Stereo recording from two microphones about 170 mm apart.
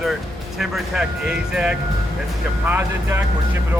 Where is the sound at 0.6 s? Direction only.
5° right (ahead or behind).